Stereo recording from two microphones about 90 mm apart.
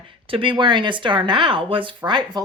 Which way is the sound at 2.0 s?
55° right (ahead or behind).